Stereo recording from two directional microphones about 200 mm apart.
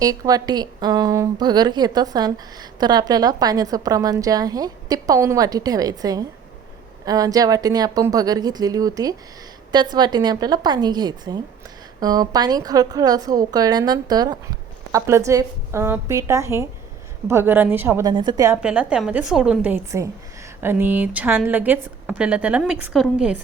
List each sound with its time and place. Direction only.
0.0 s a woman's voice: 20° right (ahead or behind)